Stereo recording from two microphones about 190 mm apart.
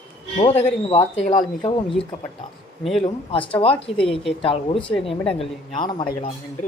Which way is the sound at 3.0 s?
30° left (ahead or behind).